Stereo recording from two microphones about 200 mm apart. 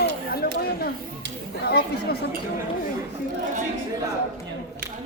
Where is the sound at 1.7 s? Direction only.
50° left (ahead or behind).